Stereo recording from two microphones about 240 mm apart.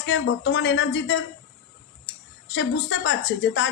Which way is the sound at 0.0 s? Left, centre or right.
Left.